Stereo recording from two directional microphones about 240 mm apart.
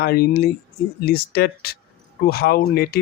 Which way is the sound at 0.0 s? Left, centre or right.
Left.